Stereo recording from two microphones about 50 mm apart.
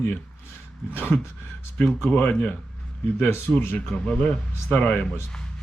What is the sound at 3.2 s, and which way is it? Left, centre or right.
Speech, left.